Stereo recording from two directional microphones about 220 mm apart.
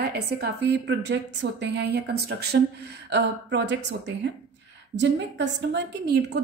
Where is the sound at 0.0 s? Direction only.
45° right (ahead or behind).